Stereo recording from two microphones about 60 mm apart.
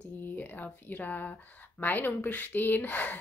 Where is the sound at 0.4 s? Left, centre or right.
Left.